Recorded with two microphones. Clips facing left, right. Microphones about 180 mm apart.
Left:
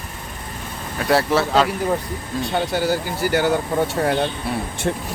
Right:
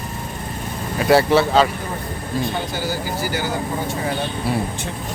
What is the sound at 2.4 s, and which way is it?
Speech, 65° left (ahead or behind).